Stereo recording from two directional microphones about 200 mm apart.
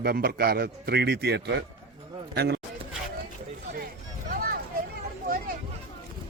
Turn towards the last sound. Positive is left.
turn(degrees=-45)  # may be behind; listen again after turning